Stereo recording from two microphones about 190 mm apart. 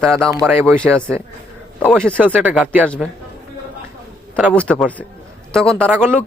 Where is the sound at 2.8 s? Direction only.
5° left (ahead or behind).